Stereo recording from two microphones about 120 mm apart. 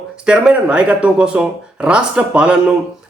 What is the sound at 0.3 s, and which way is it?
Speech, 10° right (ahead or behind).